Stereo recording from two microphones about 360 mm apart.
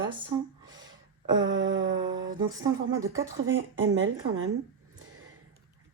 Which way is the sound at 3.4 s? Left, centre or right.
Right.